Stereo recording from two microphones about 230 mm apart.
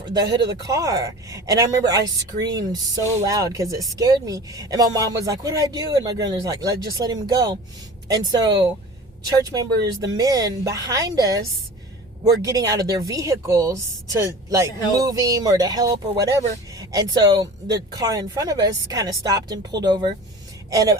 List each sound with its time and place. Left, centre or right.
0.7 s speech: centre